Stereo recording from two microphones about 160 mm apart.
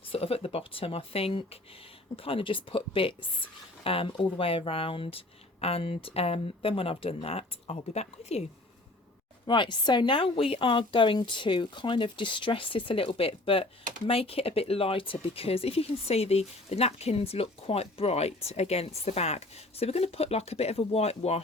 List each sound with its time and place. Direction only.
0.1 s speech: 40° left (ahead or behind)
9.5 s speech: 30° left (ahead or behind)